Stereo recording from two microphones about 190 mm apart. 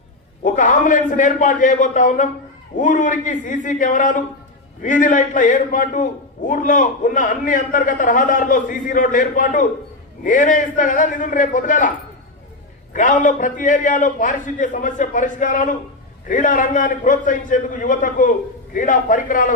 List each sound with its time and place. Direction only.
0.4 s a man's voice: 45° left (ahead or behind)
12.9 s a man's voice: 40° left (ahead or behind)